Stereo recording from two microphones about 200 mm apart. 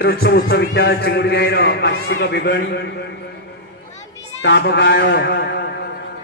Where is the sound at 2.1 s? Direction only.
55° left (ahead or behind).